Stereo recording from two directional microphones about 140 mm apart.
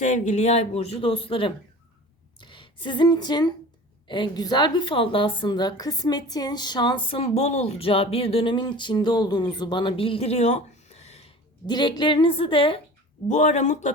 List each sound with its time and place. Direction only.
0.0 s a woman's voice: 60° left (ahead or behind)
11.6 s a woman's voice: 30° left (ahead or behind)
13.2 s speech: 60° left (ahead or behind)